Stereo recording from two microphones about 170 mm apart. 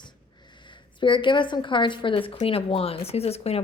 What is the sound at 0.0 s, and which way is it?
Speech, 25° left (ahead or behind).